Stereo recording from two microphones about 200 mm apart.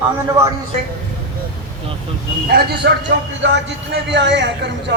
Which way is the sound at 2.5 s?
50° right (ahead or behind).